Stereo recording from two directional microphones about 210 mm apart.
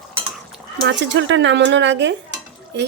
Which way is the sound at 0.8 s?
60° right (ahead or behind).